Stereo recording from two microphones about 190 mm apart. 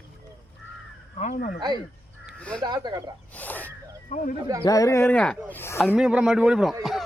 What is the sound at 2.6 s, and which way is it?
Speech, 20° right (ahead or behind).